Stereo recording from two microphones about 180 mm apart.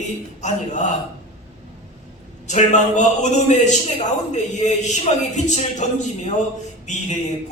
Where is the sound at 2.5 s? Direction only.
40° left (ahead or behind).